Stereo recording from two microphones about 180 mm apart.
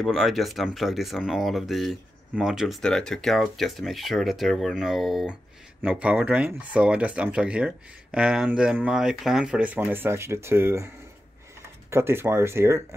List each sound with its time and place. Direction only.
0.0 s speech: centre (ahead or behind)
11.9 s speech: 15° right (ahead or behind)